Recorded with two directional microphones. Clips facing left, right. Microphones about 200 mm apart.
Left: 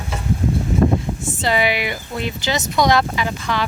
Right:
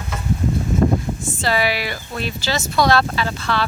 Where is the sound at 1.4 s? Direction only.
20° left (ahead or behind).